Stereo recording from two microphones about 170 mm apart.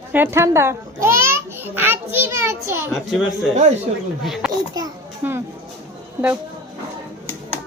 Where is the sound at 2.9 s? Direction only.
Centre (ahead or behind).